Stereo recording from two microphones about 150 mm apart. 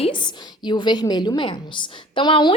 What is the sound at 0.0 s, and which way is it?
A woman's voice, 30° left (ahead or behind).